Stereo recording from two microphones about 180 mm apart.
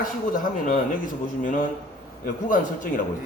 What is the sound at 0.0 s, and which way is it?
Speech, 50° left (ahead or behind).